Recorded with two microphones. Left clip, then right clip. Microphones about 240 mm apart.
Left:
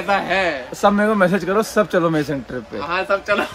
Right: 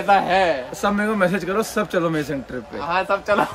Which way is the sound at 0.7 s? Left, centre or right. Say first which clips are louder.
Left 5 dB; centre.